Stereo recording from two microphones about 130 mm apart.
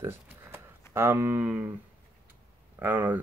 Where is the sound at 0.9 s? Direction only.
20° right (ahead or behind).